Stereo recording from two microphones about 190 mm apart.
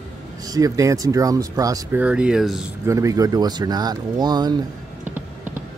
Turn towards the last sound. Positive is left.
turn(degrees=-20)  # may be behind; listen again after turning